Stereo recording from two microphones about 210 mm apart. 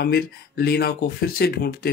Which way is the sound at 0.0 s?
50° left (ahead or behind).